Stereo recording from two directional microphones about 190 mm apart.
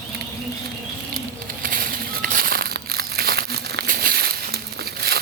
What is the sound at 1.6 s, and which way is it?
Crumpling, 50° right (ahead or behind).